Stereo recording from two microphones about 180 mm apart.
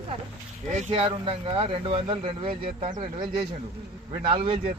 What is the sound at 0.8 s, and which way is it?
Speech, 35° right (ahead or behind).